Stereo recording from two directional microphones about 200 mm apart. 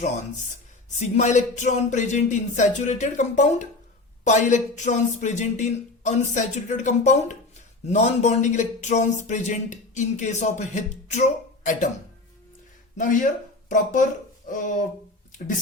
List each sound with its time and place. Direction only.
0.9 s speech: 35° left (ahead or behind)
13.0 s speech: 40° left (ahead or behind)